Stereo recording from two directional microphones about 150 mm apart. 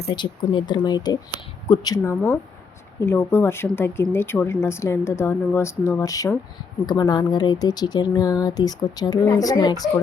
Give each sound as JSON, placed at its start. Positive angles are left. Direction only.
{"t": 0.1, "sound": "speech", "side_deg": 30}
{"t": 3.0, "sound": "speech", "side_deg": 15}